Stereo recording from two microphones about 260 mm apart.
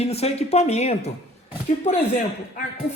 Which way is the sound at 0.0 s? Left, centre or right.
Left.